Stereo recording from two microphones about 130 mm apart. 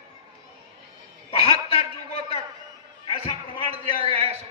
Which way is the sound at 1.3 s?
50° left (ahead or behind).